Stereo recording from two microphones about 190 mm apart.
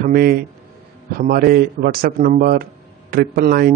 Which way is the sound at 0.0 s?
55° right (ahead or behind).